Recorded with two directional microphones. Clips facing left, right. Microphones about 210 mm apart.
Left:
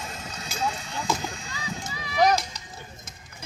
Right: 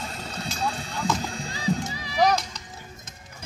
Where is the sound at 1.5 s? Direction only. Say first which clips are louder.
Right 8 dB; 35° right (ahead or behind).